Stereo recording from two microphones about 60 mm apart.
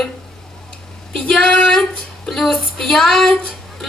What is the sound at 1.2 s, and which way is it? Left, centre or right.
Speech, centre.